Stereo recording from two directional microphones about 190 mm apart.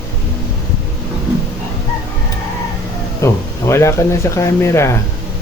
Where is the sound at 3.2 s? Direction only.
15° left (ahead or behind).